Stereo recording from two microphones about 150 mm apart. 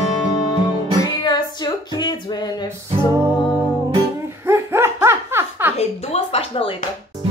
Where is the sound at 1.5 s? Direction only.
30° left (ahead or behind).